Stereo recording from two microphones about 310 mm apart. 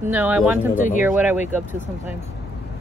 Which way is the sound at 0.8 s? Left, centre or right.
Left.